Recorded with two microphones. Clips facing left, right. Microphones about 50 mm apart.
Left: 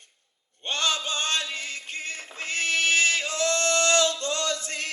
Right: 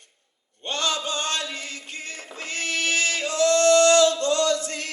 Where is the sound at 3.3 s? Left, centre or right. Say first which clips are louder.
Right 7 dB; left.